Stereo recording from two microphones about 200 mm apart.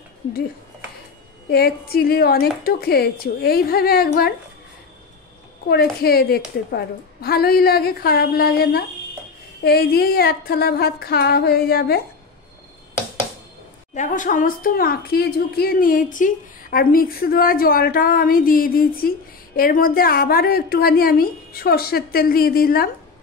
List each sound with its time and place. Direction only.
1.5 s a woman's voice: 50° left (ahead or behind)
5.7 s a woman's voice: 50° left (ahead or behind)
13.9 s a woman's voice: 40° left (ahead or behind)